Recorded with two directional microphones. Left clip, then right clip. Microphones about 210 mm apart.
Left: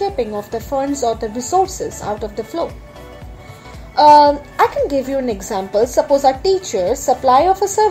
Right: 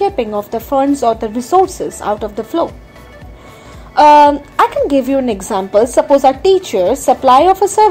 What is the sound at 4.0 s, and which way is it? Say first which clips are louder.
A woman's voice: right 2 dB; 20° right (ahead or behind).